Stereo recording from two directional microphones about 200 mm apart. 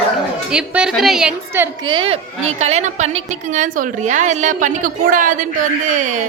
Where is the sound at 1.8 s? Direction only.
25° right (ahead or behind); by 5.5 s 40° right (ahead or behind).